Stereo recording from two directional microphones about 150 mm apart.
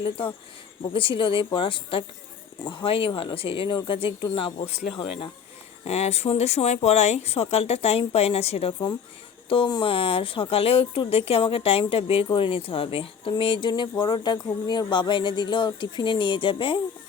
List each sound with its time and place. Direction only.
0.8 s speech: 35° left (ahead or behind)
4.5 s speech: 50° left (ahead or behind)
9.5 s speech: 30° left (ahead or behind)